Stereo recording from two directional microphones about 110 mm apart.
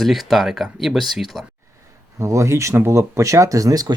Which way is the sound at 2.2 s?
25° right (ahead or behind).